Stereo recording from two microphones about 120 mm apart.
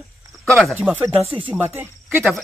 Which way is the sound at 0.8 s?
15° right (ahead or behind).